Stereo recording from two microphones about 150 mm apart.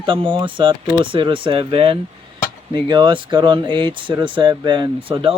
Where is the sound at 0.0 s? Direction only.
35° right (ahead or behind).